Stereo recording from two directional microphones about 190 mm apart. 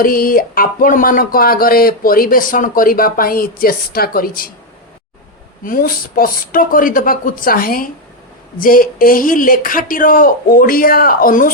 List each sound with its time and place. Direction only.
0.0 s speech: 50° left (ahead or behind)
5.6 s speech: 45° left (ahead or behind)